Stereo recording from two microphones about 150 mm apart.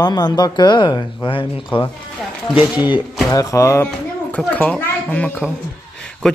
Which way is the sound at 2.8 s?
10° right (ahead or behind).